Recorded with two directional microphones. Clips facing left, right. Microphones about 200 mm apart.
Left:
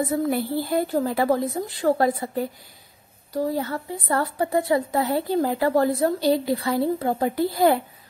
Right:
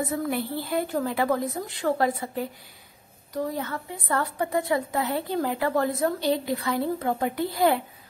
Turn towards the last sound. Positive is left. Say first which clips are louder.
# left 3 dB
turn(degrees=35)  # may be behind; listen again after turning